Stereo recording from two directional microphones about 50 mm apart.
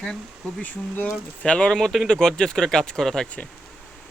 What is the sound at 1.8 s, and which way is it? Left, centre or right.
Speech, centre.